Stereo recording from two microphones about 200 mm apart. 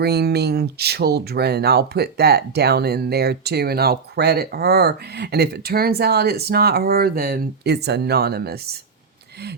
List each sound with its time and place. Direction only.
0.0 s speech: 55° right (ahead or behind)